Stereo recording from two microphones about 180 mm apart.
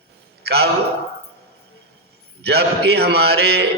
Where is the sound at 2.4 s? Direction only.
65° right (ahead or behind).